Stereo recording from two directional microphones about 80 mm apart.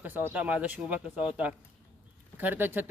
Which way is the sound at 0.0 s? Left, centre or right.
Right.